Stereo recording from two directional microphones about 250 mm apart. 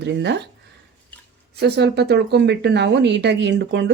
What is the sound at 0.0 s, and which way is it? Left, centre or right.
Speech, right.